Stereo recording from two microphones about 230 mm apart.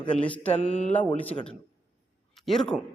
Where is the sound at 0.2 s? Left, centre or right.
Centre.